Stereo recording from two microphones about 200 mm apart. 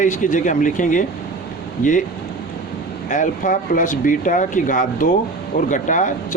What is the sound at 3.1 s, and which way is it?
Speech, 40° left (ahead or behind).